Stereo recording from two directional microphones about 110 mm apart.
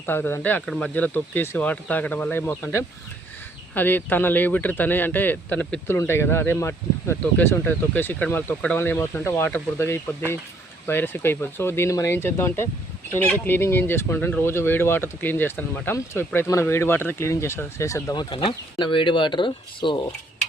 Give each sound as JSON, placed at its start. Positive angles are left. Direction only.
{"t": 0.0, "sound": "speech", "side_deg": 20}
{"t": 0.6, "sound": "speech", "side_deg": 5}
{"t": 0.9, "sound": "speech", "side_deg": 15}
{"t": 3.8, "sound": "speech", "side_deg": 15}
{"t": 18.2, "sound": "speech", "side_deg": 45}